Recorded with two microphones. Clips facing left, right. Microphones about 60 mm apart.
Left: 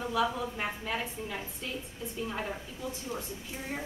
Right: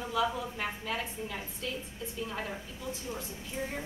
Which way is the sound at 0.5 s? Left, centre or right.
Centre.